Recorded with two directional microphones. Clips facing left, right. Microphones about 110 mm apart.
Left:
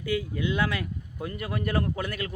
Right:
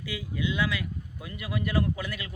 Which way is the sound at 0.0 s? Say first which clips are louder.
Left 4 dB; 45° left (ahead or behind).